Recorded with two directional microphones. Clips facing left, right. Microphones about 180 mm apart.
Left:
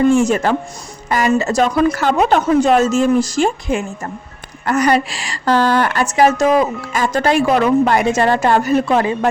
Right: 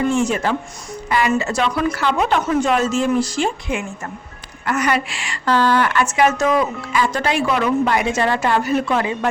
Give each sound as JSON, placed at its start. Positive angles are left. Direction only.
{"t": 0.2, "sound": "a woman's voice", "side_deg": 45}